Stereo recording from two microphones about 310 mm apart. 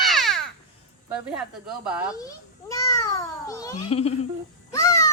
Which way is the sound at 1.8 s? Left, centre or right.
Centre.